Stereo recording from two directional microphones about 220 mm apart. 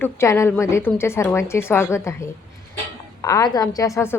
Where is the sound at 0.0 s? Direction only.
10° left (ahead or behind).